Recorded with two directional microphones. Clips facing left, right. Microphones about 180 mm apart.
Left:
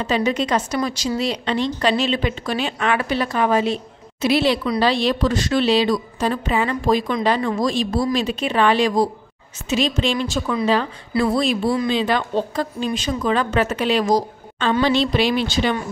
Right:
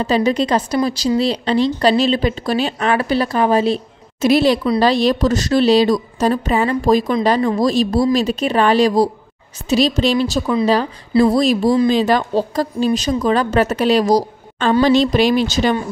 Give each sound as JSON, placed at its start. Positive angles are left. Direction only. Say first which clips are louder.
{"t": 0.0, "sound": "a woman's voice", "louder": "right 4 dB", "side_deg": -35}